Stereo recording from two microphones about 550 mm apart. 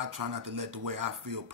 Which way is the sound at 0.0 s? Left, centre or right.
Right.